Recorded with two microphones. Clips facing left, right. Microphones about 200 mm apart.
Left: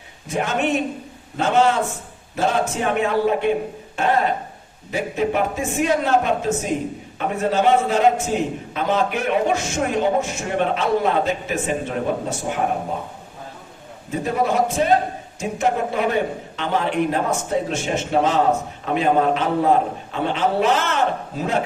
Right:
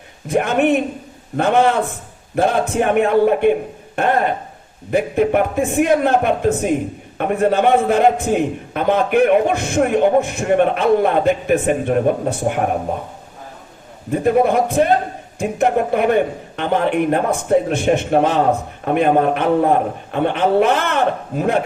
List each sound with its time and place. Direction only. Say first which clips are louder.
0.3 s a man's voice: right 6 dB; 55° right (ahead or behind)
14.1 s a man's voice: right 6 dB; 55° right (ahead or behind)